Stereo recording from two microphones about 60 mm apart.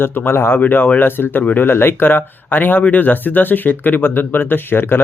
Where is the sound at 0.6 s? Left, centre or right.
Left.